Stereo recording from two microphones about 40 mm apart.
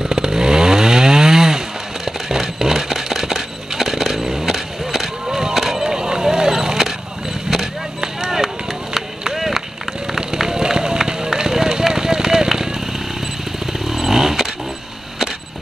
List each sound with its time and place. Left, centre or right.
0.0 s chainsaw: centre
2.0 s a sound: centre
10.1 s run: centre
13.8 s motorcycle: centre